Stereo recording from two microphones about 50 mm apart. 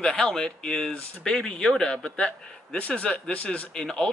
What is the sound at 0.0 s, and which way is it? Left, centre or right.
Speech, centre.